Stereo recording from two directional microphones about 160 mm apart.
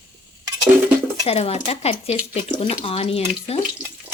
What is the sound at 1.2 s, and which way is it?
Speech, 40° left (ahead or behind).